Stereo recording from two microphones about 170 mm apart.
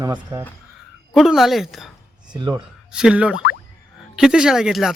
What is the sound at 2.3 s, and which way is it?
Speech, 25° right (ahead or behind).